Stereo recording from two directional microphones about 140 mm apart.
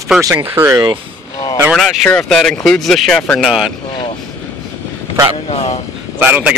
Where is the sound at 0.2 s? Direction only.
25° right (ahead or behind).